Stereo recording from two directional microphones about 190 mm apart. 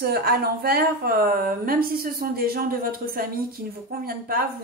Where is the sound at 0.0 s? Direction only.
55° right (ahead or behind).